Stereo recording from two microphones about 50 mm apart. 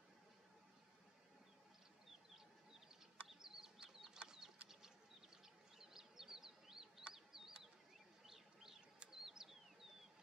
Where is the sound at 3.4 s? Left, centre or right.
Centre.